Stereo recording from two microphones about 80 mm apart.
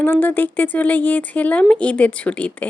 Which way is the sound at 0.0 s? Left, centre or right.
Left.